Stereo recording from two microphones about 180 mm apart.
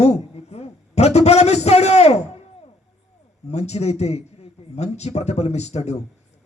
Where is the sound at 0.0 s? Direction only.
35° left (ahead or behind).